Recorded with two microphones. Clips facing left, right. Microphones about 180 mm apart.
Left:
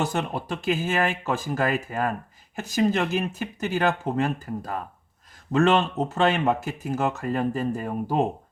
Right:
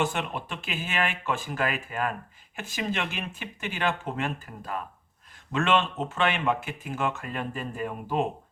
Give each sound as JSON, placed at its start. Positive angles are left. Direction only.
{"t": 0.0, "sound": "speech", "side_deg": 40}